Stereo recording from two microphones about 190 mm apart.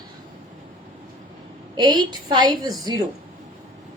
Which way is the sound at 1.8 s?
20° right (ahead or behind).